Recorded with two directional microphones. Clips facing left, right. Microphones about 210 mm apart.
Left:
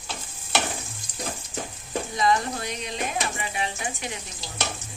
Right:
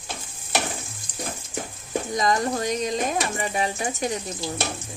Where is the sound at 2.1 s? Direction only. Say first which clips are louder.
Right 1 dB; 40° right (ahead or behind).